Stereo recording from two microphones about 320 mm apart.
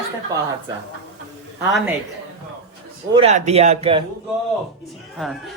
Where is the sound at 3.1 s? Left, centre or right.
Centre.